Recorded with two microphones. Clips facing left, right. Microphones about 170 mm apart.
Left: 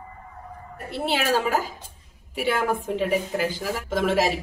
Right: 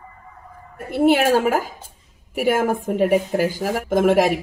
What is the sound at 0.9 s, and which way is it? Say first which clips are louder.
A woman's voice: right 8 dB; 50° right (ahead or behind).